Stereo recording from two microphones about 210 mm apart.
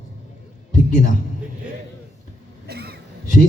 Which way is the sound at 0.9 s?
40° left (ahead or behind).